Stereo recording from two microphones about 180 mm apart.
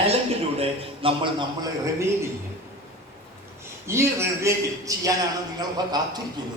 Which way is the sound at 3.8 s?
15° right (ahead or behind).